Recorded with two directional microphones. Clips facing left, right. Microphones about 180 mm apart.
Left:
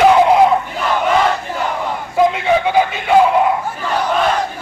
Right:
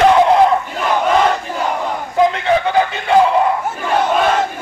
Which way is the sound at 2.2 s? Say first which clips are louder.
Left 2 dB; 5° left (ahead or behind).